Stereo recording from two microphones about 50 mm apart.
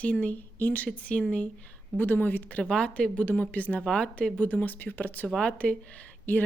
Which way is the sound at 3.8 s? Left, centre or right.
Centre.